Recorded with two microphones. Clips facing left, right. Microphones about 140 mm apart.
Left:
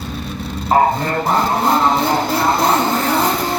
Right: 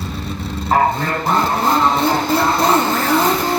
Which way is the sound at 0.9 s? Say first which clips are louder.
Left 1 dB; centre (ahead or behind).